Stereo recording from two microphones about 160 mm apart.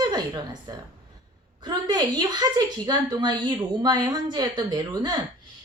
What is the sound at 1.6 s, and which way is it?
A woman's voice, 25° right (ahead or behind).